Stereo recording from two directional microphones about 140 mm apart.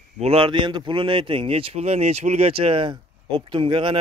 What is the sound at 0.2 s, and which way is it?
Speech, 40° right (ahead or behind).